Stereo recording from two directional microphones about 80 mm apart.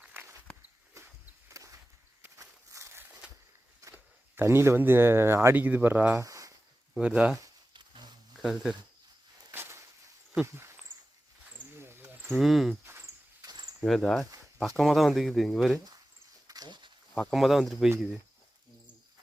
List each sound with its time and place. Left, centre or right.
0.1 s walk: right
3.9 s speech: right
6.1 s a sound: right
7.0 s speech: centre
7.7 s a sound: right
8.4 s speech: centre
9.5 s a sound: right
10.4 s speech: right
11.5 s wild animals: right
12.3 s speech: centre
13.4 s cricket: right
13.8 s speech: centre
16.5 s wild animals: right
17.2 s speech: centre